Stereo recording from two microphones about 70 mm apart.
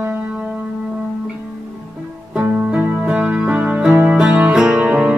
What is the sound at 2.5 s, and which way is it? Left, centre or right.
Music, centre.